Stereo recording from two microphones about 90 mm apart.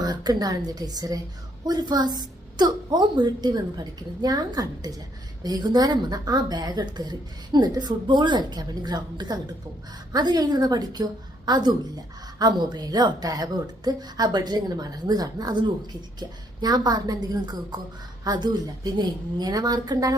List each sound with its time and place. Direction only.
0.0 s a woman's voice: 45° right (ahead or behind)